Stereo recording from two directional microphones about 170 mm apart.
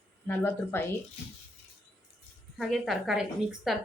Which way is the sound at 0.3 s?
15° left (ahead or behind).